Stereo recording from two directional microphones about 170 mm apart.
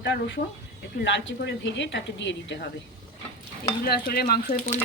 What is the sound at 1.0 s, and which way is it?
A woman's voice, 90° left.